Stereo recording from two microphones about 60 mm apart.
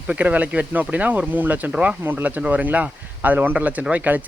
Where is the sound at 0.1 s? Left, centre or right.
Right.